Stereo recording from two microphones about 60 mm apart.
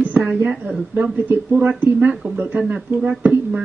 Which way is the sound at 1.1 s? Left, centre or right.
Right.